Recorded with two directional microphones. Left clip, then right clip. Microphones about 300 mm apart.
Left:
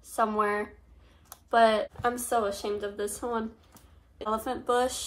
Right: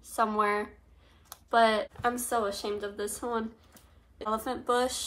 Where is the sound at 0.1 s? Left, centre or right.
Centre.